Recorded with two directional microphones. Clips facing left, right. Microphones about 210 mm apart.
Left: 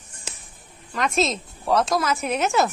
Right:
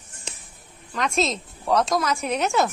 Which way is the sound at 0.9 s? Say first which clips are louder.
Left 1 dB; centre (ahead or behind).